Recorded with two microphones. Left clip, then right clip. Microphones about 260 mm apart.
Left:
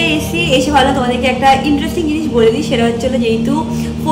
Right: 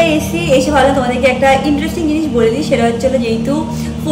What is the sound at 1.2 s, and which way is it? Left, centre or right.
Speech, left.